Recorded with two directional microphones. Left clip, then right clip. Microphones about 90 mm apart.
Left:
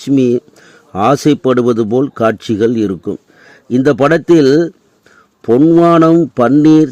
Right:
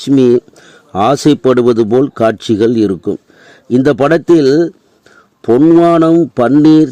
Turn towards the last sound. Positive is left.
turn(degrees=-40)  # may be behind; listen again after turning